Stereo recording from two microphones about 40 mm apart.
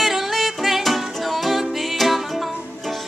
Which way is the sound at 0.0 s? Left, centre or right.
Centre.